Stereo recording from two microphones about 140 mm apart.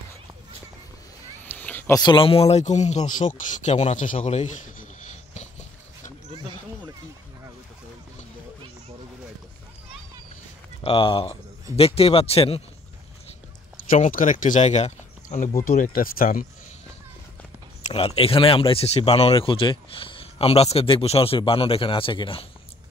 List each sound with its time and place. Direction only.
1.4 s a sound: 15° left (ahead or behind)
2.0 s speech: 35° left (ahead or behind); by 6.1 s 55° left (ahead or behind)
10.8 s speech: 40° left (ahead or behind)
13.8 s speech: 70° left (ahead or behind)
15.7 s speech: 80° left
17.8 s speech: 45° left (ahead or behind)